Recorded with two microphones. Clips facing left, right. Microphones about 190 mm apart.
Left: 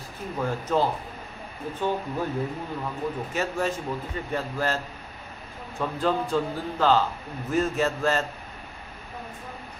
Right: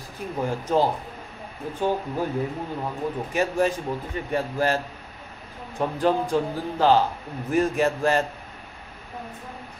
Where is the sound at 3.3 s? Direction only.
15° right (ahead or behind).